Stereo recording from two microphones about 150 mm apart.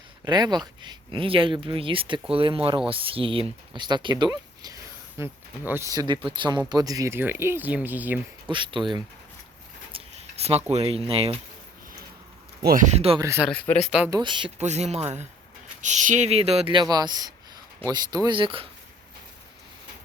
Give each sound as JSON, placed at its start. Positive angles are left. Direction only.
{"t": 0.3, "sound": "speech", "side_deg": -30}
{"t": 8.4, "sound": "speech", "side_deg": -30}
{"t": 9.9, "sound": "a sound", "side_deg": -45}
{"t": 10.7, "sound": "speech", "side_deg": -40}
{"t": 12.6, "sound": "speech", "side_deg": -60}
{"t": 13.1, "sound": "speech", "side_deg": -20}
{"t": 13.8, "sound": "speech", "side_deg": -5}
{"t": 14.1, "sound": "speech", "side_deg": -30}
{"t": 14.6, "sound": "speech", "side_deg": -50}